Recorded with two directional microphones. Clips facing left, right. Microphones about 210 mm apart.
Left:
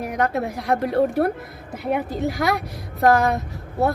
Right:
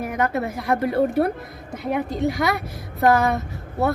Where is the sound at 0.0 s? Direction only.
Centre (ahead or behind).